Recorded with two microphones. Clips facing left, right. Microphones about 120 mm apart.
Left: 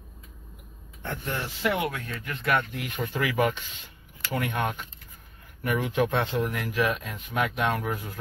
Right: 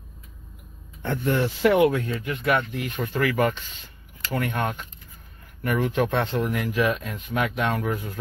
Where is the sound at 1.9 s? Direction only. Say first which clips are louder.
Right 9 dB; 30° right (ahead or behind).